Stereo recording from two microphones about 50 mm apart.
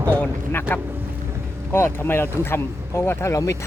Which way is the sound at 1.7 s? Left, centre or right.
Left.